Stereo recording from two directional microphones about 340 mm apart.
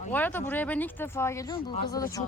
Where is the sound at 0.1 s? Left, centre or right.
Centre.